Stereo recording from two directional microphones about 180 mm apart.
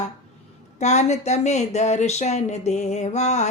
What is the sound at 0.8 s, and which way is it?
Speech, 40° left (ahead or behind).